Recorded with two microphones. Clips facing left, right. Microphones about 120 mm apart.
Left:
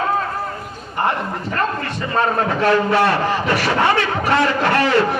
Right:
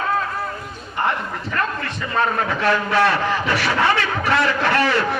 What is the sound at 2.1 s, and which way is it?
A man's voice, 30° left (ahead or behind).